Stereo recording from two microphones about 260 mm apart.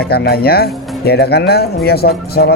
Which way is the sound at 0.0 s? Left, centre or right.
Left.